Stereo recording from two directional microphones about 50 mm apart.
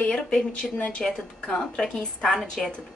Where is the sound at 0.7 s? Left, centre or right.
Left.